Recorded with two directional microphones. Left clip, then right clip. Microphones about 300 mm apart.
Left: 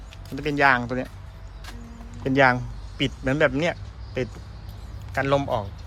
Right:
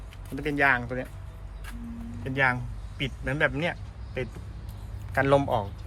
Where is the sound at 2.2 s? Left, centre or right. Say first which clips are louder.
Left 7 dB; centre.